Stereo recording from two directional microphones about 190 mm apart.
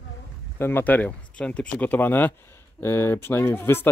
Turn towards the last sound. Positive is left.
turn(degrees=10)  # may be behind; listen again after turning